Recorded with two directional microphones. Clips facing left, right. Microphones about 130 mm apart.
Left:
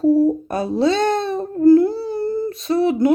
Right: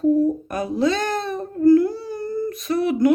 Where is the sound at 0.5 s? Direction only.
30° left (ahead or behind).